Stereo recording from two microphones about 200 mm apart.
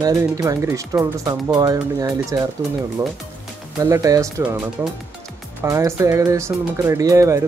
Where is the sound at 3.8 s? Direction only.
15° right (ahead or behind).